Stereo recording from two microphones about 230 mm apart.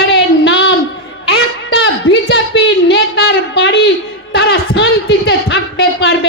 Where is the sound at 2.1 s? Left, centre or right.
Left.